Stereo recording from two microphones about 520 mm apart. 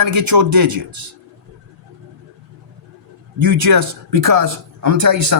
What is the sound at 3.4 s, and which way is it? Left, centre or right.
Speech, right.